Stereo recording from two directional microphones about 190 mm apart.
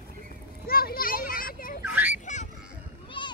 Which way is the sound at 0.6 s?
50° left (ahead or behind).